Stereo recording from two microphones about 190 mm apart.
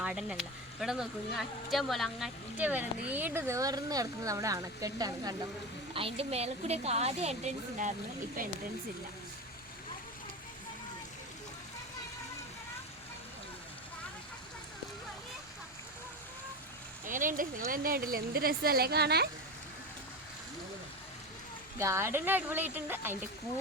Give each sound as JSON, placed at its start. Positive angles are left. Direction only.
{"t": 0.0, "sound": "speech", "side_deg": -5}
{"t": 5.9, "sound": "a woman's voice", "side_deg": -30}
{"t": 17.1, "sound": "a sound", "side_deg": -45}
{"t": 17.7, "sound": "speech", "side_deg": -50}
{"t": 21.8, "sound": "speech", "side_deg": -15}